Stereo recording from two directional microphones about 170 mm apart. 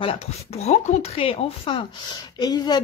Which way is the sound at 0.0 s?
35° left (ahead or behind).